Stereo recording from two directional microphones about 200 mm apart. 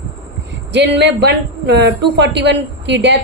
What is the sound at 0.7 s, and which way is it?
A man's voice, 60° right (ahead or behind).